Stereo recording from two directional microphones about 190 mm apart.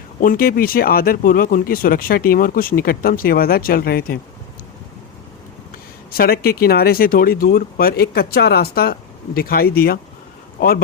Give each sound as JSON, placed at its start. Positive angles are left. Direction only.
{"t": 0.2, "sound": "speech", "side_deg": 50}
{"t": 6.1, "sound": "speech", "side_deg": 55}